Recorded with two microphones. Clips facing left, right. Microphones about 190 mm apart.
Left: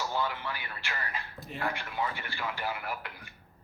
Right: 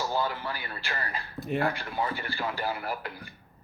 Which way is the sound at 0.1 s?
35° right (ahead or behind).